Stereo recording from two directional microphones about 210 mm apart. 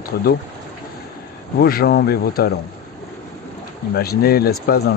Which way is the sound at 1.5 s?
45° left (ahead or behind).